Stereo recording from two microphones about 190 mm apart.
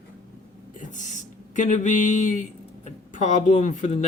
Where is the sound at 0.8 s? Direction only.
40° left (ahead or behind).